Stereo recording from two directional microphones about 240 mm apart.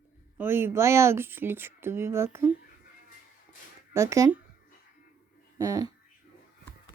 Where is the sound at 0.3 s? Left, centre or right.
Centre.